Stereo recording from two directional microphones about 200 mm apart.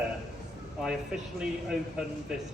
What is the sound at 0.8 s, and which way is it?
Speech, 5° right (ahead or behind).